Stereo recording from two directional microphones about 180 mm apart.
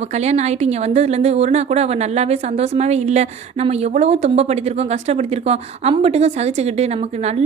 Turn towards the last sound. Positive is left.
turn(degrees=-35)  # may be behind; listen again after turning